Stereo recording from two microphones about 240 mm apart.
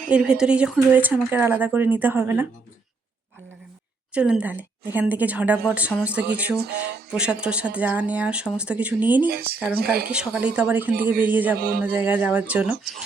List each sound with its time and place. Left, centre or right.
0.1 s speech: centre
4.1 s speech: centre
9.2 s speech: right
10.1 s speech: centre